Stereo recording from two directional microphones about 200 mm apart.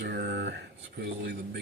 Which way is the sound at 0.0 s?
55° right (ahead or behind).